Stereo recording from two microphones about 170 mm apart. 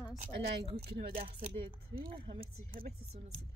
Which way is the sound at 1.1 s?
60° right (ahead or behind).